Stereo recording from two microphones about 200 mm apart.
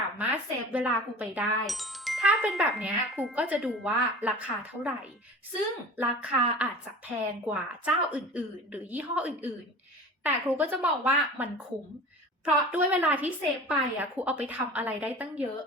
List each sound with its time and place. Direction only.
0.2 s speech: 5° right (ahead or behind)
6.0 s speech: 5° right (ahead or behind)